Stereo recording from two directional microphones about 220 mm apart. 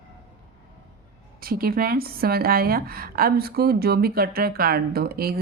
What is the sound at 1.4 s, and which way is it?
Speech, 40° right (ahead or behind).